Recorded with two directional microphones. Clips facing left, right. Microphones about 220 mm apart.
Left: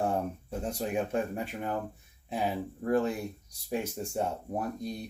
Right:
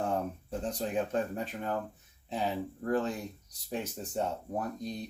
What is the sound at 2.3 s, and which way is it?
Speech, 10° left (ahead or behind).